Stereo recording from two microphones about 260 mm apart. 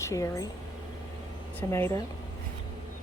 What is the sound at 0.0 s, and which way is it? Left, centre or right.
Speech, centre.